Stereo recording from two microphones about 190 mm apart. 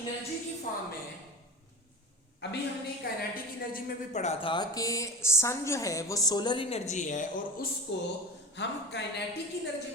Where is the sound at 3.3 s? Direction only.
50° left (ahead or behind).